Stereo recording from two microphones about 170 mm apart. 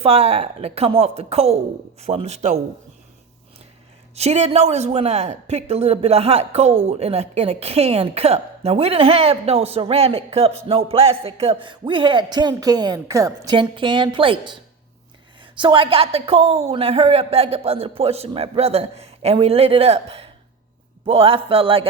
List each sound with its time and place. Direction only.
0.0 s a woman's voice: 35° right (ahead or behind)
4.1 s a woman's voice: 40° right (ahead or behind)
10.7 s music: 35° right (ahead or behind)
15.5 s a woman's voice: 30° right (ahead or behind)